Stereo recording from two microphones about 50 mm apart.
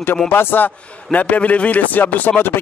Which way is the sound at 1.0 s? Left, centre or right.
Left.